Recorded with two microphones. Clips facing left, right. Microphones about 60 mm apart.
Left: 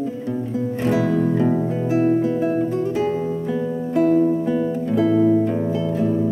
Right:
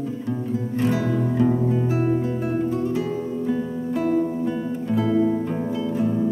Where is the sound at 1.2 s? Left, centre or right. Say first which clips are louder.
Left 2 dB; centre.